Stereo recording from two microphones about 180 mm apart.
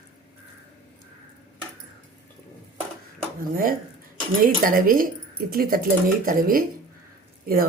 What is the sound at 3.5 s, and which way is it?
Speech, 50° right (ahead or behind).